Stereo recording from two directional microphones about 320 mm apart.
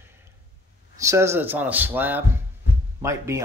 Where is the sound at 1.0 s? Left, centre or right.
Centre.